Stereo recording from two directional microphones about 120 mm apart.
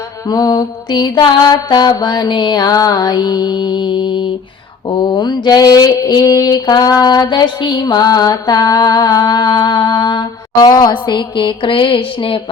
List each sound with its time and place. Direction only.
0.3 s mantra: 30° left (ahead or behind); by 12.4 s 50° left (ahead or behind)